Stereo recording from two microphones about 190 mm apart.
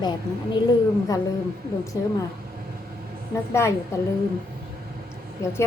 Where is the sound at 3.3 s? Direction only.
15° left (ahead or behind).